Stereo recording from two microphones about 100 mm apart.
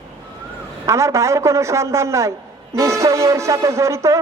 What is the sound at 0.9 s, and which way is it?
Speech, 30° right (ahead or behind).